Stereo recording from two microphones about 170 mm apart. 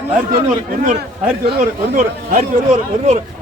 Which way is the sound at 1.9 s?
50° right (ahead or behind).